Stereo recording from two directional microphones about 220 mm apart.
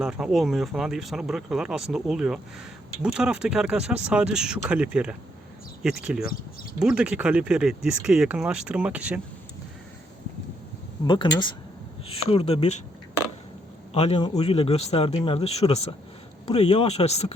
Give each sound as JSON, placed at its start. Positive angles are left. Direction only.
{"t": 0.0, "sound": "speech", "side_deg": 0}
{"t": 11.0, "sound": "speech", "side_deg": 20}
{"t": 13.9, "sound": "speech", "side_deg": 25}